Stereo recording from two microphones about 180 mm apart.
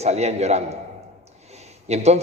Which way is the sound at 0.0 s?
35° right (ahead or behind).